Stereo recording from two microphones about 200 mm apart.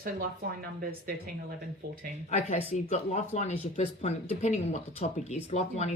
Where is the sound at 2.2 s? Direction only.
35° left (ahead or behind).